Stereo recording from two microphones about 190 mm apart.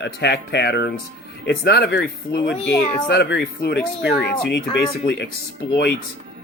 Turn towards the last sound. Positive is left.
turn(degrees=60)  # may be behind; listen again after turning